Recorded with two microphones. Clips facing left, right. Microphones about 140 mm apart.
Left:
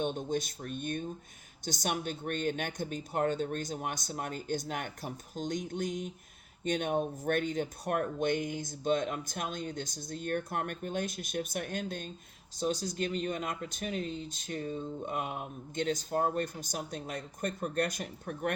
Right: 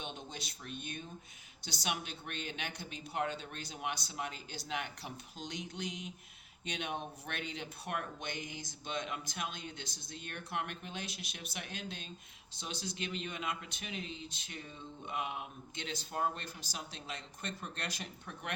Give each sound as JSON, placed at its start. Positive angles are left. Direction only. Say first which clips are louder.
{"t": 0.0, "sound": "speech", "louder": "left 13 dB", "side_deg": 50}